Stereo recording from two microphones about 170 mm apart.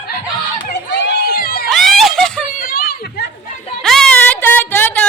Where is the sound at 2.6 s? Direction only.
55° left (ahead or behind).